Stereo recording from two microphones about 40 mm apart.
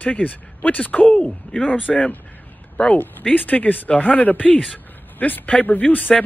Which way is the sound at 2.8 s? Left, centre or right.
Left.